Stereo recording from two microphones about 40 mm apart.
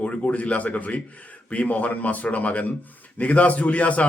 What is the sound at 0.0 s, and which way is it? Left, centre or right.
A man's voice, left.